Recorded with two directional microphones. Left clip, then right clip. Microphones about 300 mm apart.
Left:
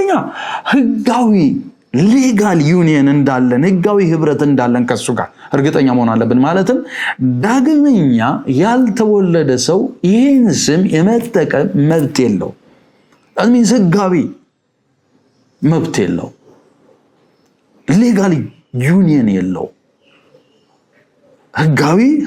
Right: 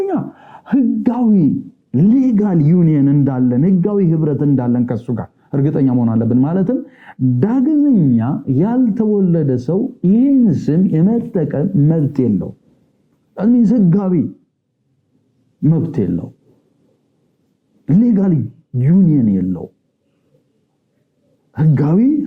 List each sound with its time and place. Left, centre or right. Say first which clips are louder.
0.0 s speech: left 6 dB; centre
9.7 s speech: left 5 dB; centre
10.0 s speech: left 3 dB; centre
15.6 s speech: left 4 dB; centre
17.8 s speech: left 3 dB; centre
21.5 s speech: left 5 dB; centre